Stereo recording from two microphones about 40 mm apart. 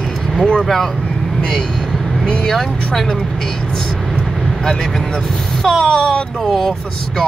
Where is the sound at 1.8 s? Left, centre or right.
Centre.